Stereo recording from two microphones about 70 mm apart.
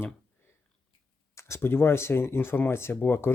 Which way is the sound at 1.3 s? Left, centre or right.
Left.